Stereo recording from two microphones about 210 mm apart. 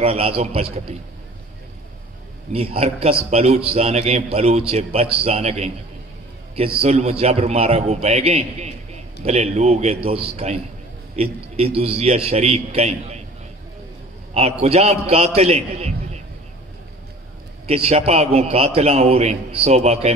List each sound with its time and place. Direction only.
0.0 s a man's voice: 25° right (ahead or behind)
2.5 s a man's voice: 30° right (ahead or behind)
6.8 s a man's voice: 30° right (ahead or behind)
14.3 s a man's voice: 30° right (ahead or behind)
17.6 s a man's voice: 30° right (ahead or behind)